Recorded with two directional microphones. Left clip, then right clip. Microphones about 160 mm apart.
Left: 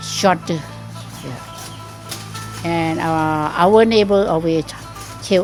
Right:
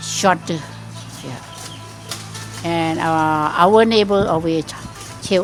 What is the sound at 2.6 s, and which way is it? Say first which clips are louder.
A woman's voice: even; centre (ahead or behind).